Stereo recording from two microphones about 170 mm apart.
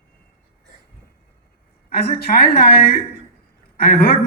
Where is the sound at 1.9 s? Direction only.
65° left (ahead or behind).